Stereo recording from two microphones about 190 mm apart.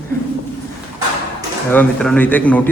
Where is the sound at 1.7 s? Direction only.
5° left (ahead or behind).